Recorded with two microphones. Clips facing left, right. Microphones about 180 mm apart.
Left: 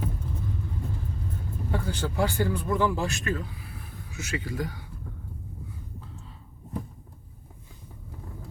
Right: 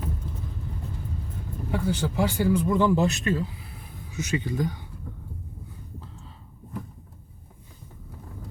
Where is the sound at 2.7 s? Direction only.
20° right (ahead or behind).